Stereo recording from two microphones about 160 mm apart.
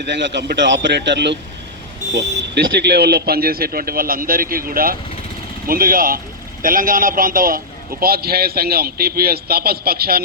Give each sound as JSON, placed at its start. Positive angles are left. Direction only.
{"t": 0.0, "sound": "a man's voice", "side_deg": -90}
{"t": 2.7, "sound": "a man's voice", "side_deg": -85}
{"t": 8.0, "sound": "a man's voice", "side_deg": -75}